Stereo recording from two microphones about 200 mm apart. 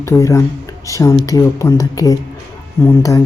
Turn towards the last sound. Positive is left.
turn(degrees=15)  # may be behind; listen again after turning